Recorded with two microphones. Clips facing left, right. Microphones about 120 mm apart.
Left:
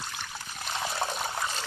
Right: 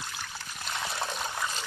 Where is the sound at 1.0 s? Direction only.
25° left (ahead or behind).